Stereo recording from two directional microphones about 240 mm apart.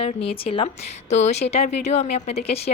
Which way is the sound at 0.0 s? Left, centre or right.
Left.